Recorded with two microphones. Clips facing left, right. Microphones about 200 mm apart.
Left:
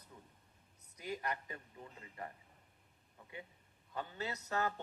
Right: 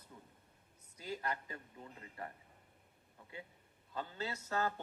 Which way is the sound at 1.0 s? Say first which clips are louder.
Even; 20° left (ahead or behind).